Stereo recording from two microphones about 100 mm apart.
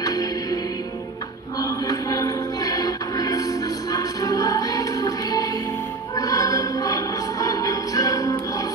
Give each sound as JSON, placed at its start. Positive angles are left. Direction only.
{"t": 0.0, "sound": "music", "side_deg": 35}
{"t": 1.6, "sound": "music", "side_deg": 35}